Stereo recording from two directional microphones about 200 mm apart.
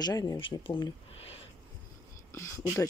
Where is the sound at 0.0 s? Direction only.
20° left (ahead or behind).